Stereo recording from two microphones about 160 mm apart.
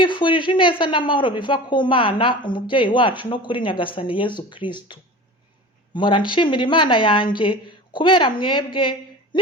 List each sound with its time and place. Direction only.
0.0 s a woman's voice: 30° left (ahead or behind)